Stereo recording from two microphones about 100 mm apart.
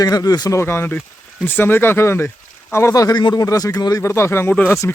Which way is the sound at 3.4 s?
35° left (ahead or behind).